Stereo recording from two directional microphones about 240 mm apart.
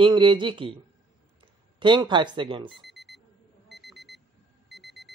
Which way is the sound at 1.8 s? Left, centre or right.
Centre.